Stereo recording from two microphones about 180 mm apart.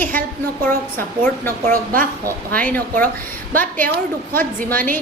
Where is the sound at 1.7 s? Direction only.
50° right (ahead or behind).